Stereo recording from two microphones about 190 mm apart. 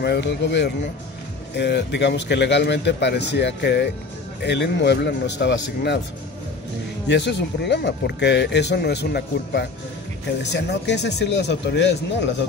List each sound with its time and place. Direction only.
0.0 s speech: 65° left (ahead or behind)
7.1 s speech: 65° left (ahead or behind)